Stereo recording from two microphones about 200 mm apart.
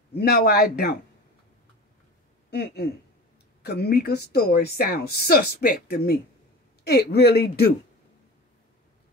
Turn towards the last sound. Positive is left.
turn(degrees=55)  # may be behind; listen again after turning